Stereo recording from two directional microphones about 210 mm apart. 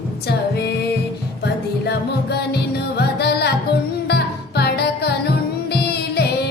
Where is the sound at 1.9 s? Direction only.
50° left (ahead or behind).